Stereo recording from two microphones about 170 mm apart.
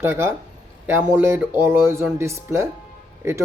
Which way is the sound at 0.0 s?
15° right (ahead or behind).